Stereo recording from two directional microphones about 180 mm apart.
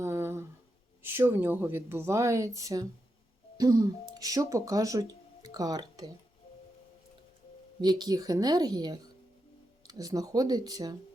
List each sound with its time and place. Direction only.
0.0 s a sound: 15° right (ahead or behind)
1.0 s a woman's voice: 10° right (ahead or behind)
7.8 s a woman's voice: 25° right (ahead or behind)